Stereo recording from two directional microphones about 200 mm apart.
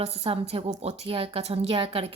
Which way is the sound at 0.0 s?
30° right (ahead or behind).